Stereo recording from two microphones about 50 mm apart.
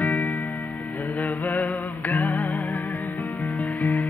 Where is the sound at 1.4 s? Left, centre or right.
Left.